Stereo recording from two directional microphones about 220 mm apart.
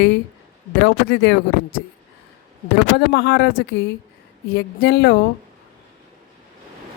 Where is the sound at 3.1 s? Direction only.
50° left (ahead or behind).